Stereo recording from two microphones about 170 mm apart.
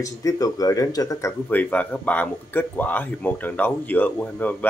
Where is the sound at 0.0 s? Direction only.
20° left (ahead or behind).